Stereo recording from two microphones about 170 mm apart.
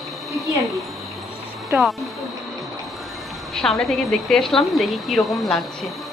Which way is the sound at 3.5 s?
Centre (ahead or behind).